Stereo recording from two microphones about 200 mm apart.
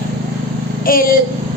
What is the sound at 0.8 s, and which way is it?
Speech, 45° left (ahead or behind).